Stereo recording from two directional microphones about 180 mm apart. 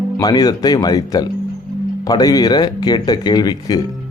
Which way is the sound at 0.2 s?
20° left (ahead or behind).